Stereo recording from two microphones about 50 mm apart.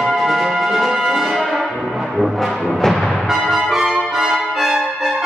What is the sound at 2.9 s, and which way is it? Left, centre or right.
Music, centre.